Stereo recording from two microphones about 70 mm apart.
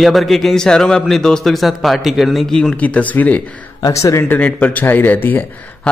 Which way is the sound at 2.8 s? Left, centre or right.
Left.